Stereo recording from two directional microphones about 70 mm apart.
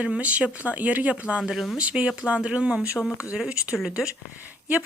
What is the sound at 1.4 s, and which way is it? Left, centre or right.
Speech, centre.